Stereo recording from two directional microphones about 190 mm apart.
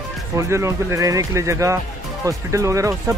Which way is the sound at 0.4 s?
15° right (ahead or behind).